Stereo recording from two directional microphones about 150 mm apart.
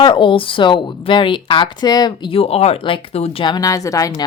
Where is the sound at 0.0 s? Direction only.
35° left (ahead or behind).